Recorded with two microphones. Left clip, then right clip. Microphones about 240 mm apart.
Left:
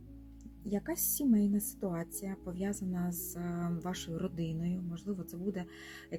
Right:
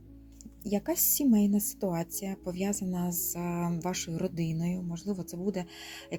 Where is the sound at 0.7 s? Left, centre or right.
Right.